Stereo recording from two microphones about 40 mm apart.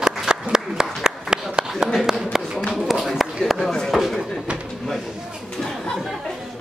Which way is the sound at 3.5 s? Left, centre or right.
Centre.